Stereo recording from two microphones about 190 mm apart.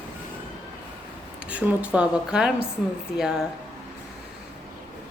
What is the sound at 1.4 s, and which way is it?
A woman's voice, 5° right (ahead or behind).